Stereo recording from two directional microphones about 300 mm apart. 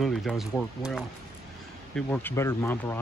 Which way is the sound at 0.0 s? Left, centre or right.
Centre.